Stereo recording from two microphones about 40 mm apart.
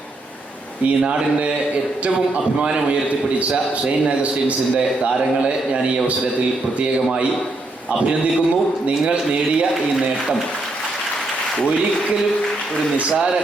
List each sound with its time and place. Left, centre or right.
0.9 s speech: right
3.8 s a man's voice: right
9.0 s speech: right